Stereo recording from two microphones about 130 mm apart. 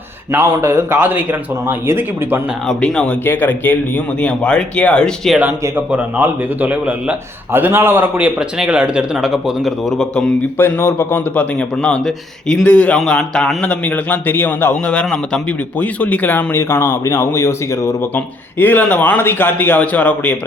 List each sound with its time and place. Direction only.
0.3 s a man's voice: 20° right (ahead or behind)
2.6 s speech: 5° left (ahead or behind)
5.9 s a man's voice: 10° right (ahead or behind)
10.6 s speech: 20° left (ahead or behind)
11.3 s speech: 5° left (ahead or behind)